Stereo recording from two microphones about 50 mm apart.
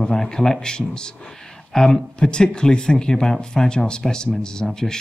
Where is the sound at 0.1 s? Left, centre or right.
Centre.